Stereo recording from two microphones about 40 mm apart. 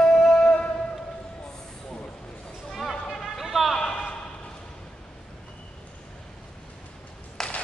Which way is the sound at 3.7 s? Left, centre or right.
Centre.